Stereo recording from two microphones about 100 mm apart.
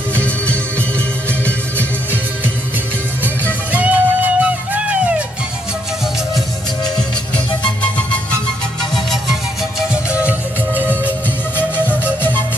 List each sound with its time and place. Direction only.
0.1 s music: 15° left (ahead or behind)
3.7 s music: 15° right (ahead or behind)
7.3 s music: 10° left (ahead or behind)
8.9 s music: centre (ahead or behind)